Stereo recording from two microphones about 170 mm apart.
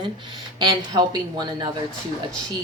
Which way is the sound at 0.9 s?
25° right (ahead or behind).